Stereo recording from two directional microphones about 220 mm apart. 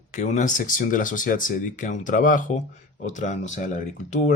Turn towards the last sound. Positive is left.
turn(degrees=35)  # may be behind; listen again after turning